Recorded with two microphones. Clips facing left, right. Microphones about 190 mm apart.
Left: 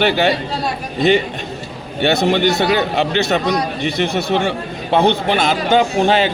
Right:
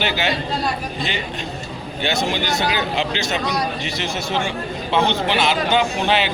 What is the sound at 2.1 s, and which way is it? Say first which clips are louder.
A man's voice: left 7 dB; 60° left (ahead or behind).